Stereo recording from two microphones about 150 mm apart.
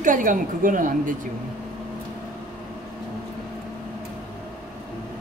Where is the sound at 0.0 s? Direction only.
60° right (ahead or behind).